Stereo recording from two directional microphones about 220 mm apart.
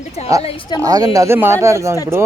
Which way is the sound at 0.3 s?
15° right (ahead or behind).